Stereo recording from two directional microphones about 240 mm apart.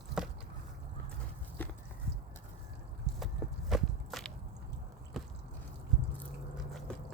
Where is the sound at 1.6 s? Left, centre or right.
Centre.